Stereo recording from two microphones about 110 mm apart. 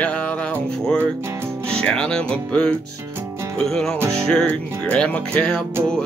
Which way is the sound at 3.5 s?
5° left (ahead or behind).